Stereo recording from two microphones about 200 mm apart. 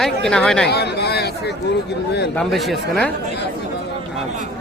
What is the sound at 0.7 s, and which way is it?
Speech, 55° left (ahead or behind).